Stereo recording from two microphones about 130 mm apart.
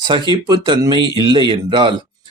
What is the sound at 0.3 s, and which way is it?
Speech, 35° right (ahead or behind).